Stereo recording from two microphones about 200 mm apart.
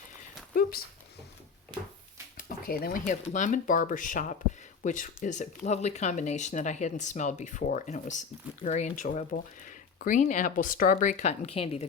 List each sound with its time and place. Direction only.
0.5 s dog: 45° left (ahead or behind)
2.4 s speech: 45° left (ahead or behind)